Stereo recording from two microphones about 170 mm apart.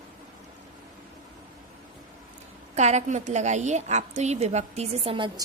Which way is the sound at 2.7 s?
40° right (ahead or behind).